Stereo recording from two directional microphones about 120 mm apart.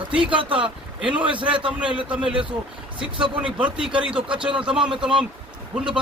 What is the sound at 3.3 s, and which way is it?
Speech, 10° right (ahead or behind).